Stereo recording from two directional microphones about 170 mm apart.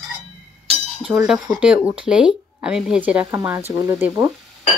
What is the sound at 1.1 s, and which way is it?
A woman's voice, 15° right (ahead or behind).